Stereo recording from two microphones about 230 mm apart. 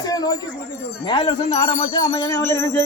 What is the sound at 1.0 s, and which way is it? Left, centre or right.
Music, left.